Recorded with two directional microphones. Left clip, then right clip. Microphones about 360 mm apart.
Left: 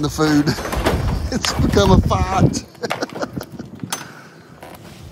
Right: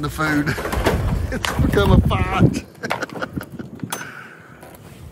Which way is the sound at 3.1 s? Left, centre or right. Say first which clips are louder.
Left 2 dB; centre.